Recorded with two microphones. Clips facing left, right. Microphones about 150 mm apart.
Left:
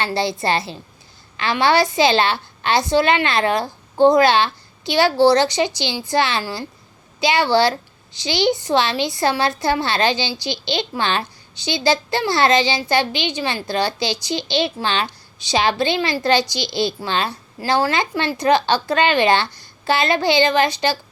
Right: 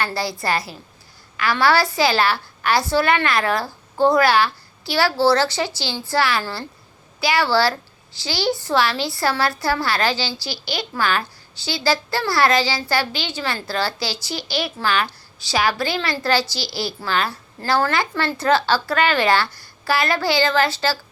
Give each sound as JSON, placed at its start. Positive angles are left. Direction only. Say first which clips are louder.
{"t": 0.0, "sound": "a woman's voice", "louder": "left 3 dB", "side_deg": 20}